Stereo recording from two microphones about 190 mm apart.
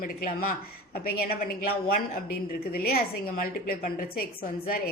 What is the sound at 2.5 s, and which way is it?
A woman's voice, 55° left (ahead or behind).